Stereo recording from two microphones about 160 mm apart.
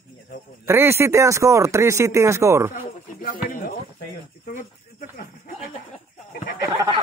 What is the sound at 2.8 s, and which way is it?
Speech, 60° left (ahead or behind).